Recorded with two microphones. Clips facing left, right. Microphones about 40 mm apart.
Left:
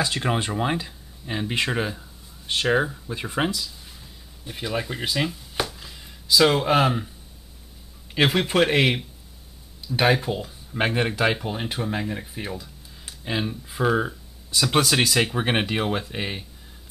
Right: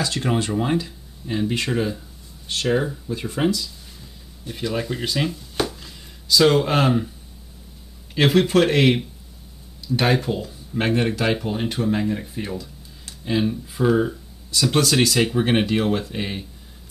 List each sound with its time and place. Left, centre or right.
0.0 s speech: centre
8.1 s speech: centre
9.9 s speech: centre
10.4 s a sound: centre
10.9 s speech: centre
12.5 s speech: centre